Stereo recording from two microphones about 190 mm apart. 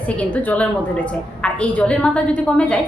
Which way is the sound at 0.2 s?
5° left (ahead or behind).